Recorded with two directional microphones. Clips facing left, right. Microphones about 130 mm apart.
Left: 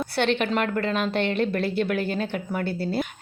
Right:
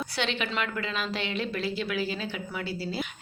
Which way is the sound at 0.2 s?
55° left (ahead or behind).